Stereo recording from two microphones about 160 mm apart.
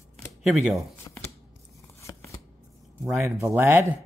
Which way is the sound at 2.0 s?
20° left (ahead or behind).